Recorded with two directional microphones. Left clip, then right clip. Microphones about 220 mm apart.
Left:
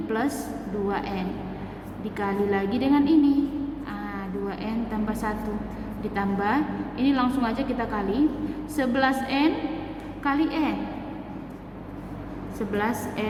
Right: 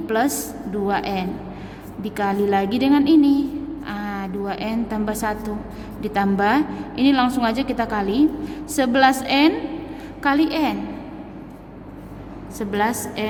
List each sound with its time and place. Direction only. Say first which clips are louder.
0.1 s a woman's voice: right 7 dB; 45° right (ahead or behind)
12.5 s a woman's voice: right 5 dB; 45° right (ahead or behind)